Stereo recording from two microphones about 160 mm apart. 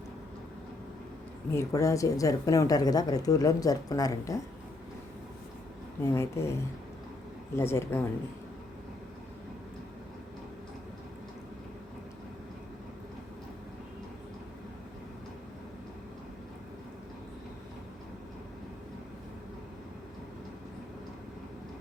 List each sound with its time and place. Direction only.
1.5 s speech: 20° left (ahead or behind)
6.1 s speech: 15° left (ahead or behind)